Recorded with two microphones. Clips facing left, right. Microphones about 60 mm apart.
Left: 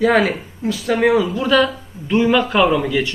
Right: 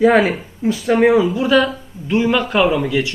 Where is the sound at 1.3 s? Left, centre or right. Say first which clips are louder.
Right 1 dB; centre.